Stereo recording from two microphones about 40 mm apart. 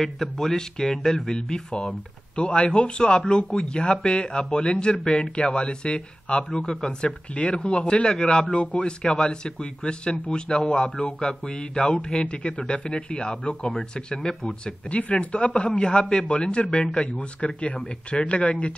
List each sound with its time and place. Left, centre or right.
0.0 s speech: centre
1.9 s speech: left
7.3 s speech: left
14.9 s speech: left